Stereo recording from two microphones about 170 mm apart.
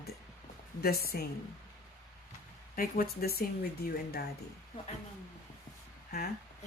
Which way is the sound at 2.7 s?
60° left (ahead or behind).